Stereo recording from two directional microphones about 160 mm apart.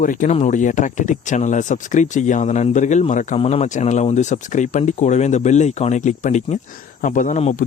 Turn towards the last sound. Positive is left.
turn(degrees=50)  # may be behind; listen again after turning